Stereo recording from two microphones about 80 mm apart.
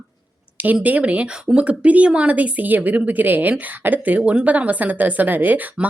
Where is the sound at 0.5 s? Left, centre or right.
Centre.